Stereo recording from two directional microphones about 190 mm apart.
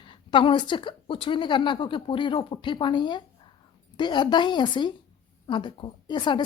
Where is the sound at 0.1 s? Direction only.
25° left (ahead or behind).